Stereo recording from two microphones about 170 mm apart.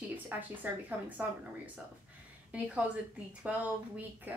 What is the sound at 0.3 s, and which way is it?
Speech, 10° right (ahead or behind).